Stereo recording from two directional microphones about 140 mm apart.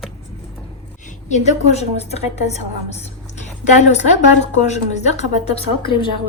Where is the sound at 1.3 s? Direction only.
55° left (ahead or behind).